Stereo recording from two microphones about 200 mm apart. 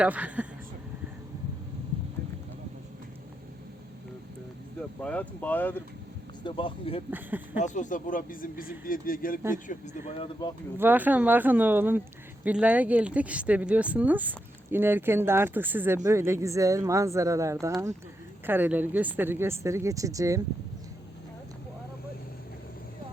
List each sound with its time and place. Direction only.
0.0 s speech: 5° right (ahead or behind)
4.9 s speech: 5° left (ahead or behind)
6.4 s speech: 25° left (ahead or behind)
7.1 s speech: 10° right (ahead or behind)
7.6 s speech: 40° left (ahead or behind)
10.1 s speech: 25° left (ahead or behind)
10.8 s speech: 10° right (ahead or behind)